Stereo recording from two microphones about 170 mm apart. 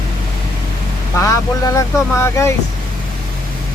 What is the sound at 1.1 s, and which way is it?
Speech, 20° left (ahead or behind).